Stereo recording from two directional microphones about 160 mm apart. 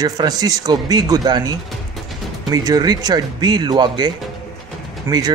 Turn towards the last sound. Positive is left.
turn(degrees=-10)  # may be behind; listen again after turning